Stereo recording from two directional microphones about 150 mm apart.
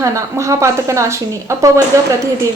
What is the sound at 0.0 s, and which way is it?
A woman's voice, 20° right (ahead or behind).